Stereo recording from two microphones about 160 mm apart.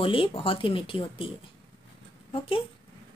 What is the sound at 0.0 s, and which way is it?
A woman's voice, 35° left (ahead or behind).